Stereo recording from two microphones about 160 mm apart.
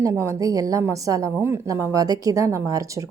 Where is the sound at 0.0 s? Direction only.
20° right (ahead or behind).